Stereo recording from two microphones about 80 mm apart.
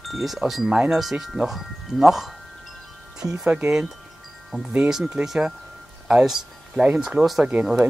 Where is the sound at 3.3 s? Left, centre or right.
Centre.